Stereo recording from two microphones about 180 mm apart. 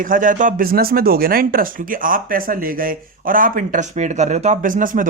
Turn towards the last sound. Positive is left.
turn(degrees=-45)  # may be behind; listen again after turning